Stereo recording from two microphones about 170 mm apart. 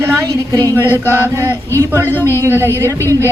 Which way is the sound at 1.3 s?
15° right (ahead or behind).